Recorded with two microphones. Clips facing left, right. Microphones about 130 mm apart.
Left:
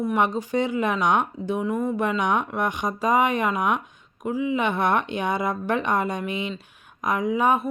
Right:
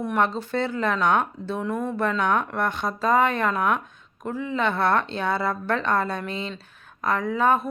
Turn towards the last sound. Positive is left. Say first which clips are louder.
# even
turn(degrees=15)  # may be behind; listen again after turning